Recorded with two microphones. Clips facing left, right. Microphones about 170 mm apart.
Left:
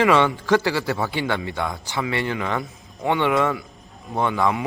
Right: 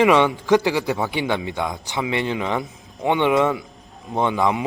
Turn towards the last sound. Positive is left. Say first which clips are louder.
# right 1 dB
turn(degrees=-20)  # may be behind; listen again after turning